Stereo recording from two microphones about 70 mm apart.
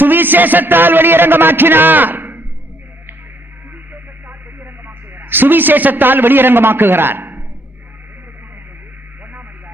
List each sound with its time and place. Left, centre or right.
0.0 s a man's voice: right
4.3 s radio: right